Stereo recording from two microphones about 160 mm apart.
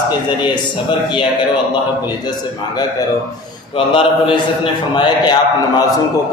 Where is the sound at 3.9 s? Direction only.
35° left (ahead or behind).